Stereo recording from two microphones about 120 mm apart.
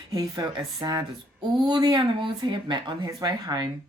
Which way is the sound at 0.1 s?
30° right (ahead or behind).